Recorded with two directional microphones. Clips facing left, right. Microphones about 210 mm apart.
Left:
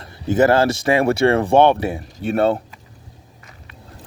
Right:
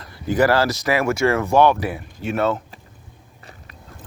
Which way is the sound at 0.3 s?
25° left (ahead or behind).